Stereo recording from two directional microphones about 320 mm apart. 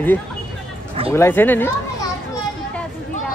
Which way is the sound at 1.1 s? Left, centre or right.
Centre.